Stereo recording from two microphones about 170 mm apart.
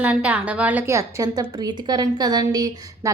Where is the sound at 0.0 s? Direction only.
5° right (ahead or behind).